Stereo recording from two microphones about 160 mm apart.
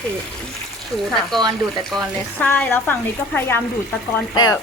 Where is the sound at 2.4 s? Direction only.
10° left (ahead or behind).